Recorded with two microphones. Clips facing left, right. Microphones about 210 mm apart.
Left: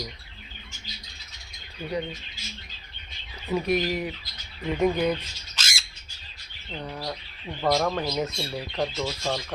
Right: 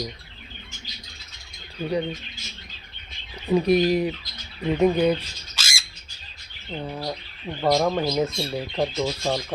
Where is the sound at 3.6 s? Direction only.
35° right (ahead or behind).